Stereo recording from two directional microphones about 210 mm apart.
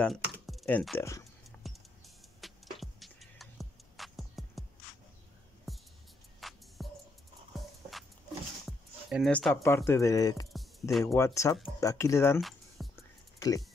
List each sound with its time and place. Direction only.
0.0 s speech: centre (ahead or behind)
2.4 s music: centre (ahead or behind)
5.7 s music: centre (ahead or behind)
8.6 s music: centre (ahead or behind)
9.8 s speech: 15° left (ahead or behind)
10.5 s music: centre (ahead or behind)
11.1 s speech: 15° left (ahead or behind)
12.4 s music: centre (ahead or behind)
13.4 s speech: 15° left (ahead or behind)